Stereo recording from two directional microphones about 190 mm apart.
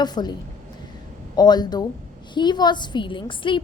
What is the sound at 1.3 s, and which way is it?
A woman's voice, 20° left (ahead or behind).